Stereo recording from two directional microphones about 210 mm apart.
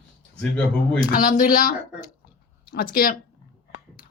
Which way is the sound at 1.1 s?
40° left (ahead or behind).